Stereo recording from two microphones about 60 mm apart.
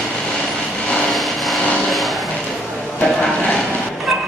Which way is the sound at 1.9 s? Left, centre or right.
Centre.